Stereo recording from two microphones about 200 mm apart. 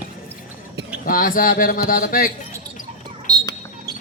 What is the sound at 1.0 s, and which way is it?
A man's voice, 45° left (ahead or behind).